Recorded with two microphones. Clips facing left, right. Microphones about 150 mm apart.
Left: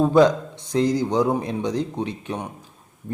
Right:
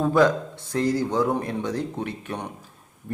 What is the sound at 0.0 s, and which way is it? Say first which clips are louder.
A man's voice: left 3 dB; 20° left (ahead or behind).